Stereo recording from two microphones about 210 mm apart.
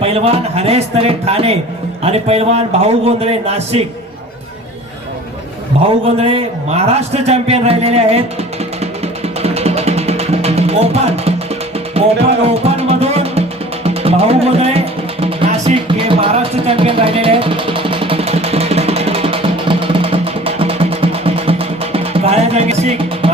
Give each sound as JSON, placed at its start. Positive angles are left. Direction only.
{"t": 0.0, "sound": "a man's voice", "side_deg": -30}
{"t": 5.7, "sound": "a man's voice", "side_deg": -30}
{"t": 9.4, "sound": "music", "side_deg": -30}